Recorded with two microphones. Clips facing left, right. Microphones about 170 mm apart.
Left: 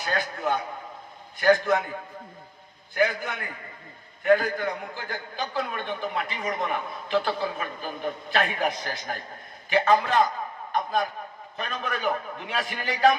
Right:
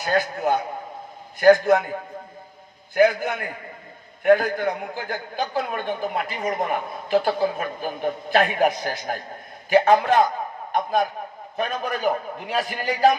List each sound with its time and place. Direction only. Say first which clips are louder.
0.0 s a man's voice: right 6 dB; 45° right (ahead or behind)
11.5 s a man's voice: right 6 dB; 50° right (ahead or behind)